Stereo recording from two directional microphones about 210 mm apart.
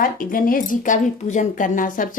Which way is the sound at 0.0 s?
40° left (ahead or behind).